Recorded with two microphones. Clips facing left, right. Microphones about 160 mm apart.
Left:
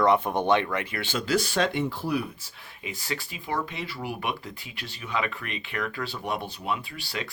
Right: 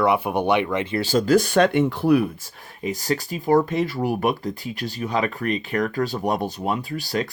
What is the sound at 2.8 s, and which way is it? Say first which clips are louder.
Speech: right 10 dB; 40° right (ahead or behind).